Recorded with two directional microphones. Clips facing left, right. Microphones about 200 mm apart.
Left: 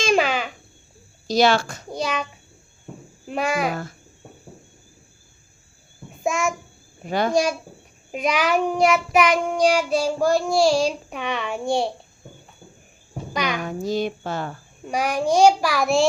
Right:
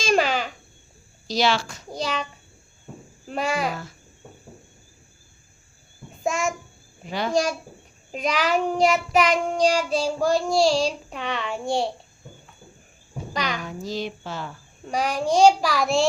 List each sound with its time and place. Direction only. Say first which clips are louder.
0.1 s babbling: right 1 dB; 5° left (ahead or behind)
1.3 s speech: left 5 dB; 50° left (ahead or behind)
2.0 s child singing: left 2 dB; 10° left (ahead or behind)
3.2 s child singing: left 2 dB; 10° left (ahead or behind)
3.7 s speech: left 4 dB; 50° left (ahead or behind)
6.2 s child singing: left 2 dB; 10° left (ahead or behind)
7.0 s speech: left 5 dB; 50° left (ahead or behind)
8.1 s child singing: left 2 dB; 10° left (ahead or behind)
13.3 s child singing: left 3 dB; 10° left (ahead or behind)
13.6 s speech: left 6 dB; 55° left (ahead or behind)
14.8 s child singing: left 2 dB; 10° left (ahead or behind)